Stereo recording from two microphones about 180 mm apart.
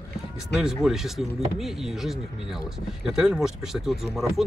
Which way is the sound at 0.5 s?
Centre (ahead or behind).